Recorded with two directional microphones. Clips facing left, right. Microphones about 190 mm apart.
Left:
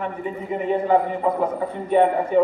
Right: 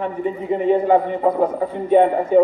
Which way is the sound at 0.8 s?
45° right (ahead or behind).